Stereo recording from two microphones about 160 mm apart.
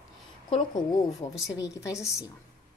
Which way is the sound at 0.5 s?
25° left (ahead or behind).